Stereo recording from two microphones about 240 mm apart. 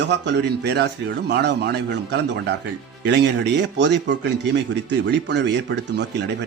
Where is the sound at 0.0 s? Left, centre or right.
Right.